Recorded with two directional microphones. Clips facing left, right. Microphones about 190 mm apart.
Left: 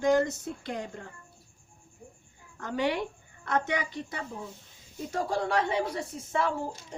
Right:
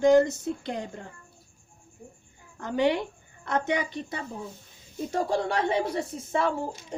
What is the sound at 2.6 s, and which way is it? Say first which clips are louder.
A woman's voice: right 4 dB; 20° right (ahead or behind).